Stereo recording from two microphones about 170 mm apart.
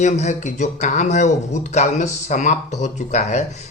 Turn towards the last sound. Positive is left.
turn(degrees=40)  # may be behind; listen again after turning